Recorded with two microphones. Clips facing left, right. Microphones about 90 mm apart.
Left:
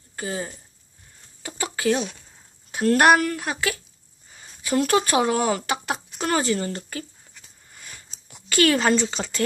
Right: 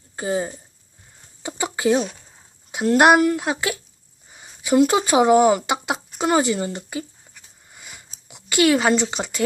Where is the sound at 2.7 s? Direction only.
15° right (ahead or behind).